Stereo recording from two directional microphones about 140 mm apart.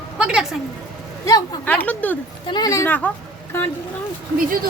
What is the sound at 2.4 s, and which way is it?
Speech, 30° left (ahead or behind).